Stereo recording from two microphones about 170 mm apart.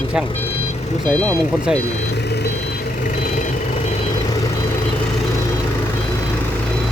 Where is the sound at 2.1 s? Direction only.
75° left (ahead or behind).